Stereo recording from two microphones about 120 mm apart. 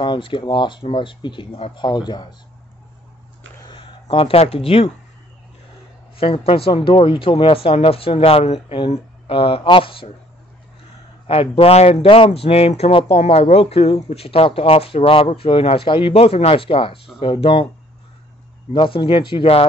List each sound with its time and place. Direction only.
0.0 s speech: 45° left (ahead or behind)
3.6 s speech: 45° left (ahead or behind)
6.1 s speech: 50° left (ahead or behind)
11.2 s speech: 55° left (ahead or behind)
18.7 s speech: 45° left (ahead or behind)